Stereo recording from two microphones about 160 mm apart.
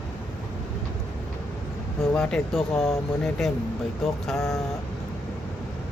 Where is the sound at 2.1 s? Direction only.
5° left (ahead or behind).